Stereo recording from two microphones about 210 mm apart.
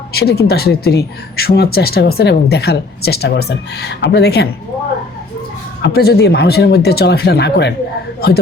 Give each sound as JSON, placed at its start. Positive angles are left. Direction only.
{"t": 0.1, "sound": "speech", "side_deg": 50}
{"t": 5.8, "sound": "speech", "side_deg": 50}